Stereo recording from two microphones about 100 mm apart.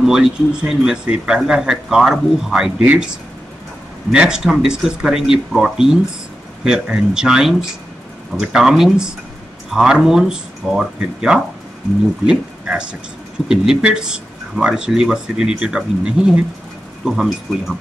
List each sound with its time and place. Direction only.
0.0 s speech: 5° right (ahead or behind)
4.1 s speech: 10° right (ahead or behind)